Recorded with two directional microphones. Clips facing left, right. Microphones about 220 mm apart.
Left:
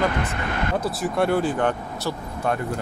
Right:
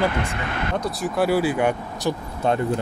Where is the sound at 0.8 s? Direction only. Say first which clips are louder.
Right 2 dB; centre (ahead or behind).